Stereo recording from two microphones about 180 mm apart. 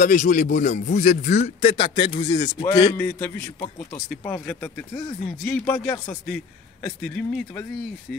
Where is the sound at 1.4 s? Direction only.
30° left (ahead or behind).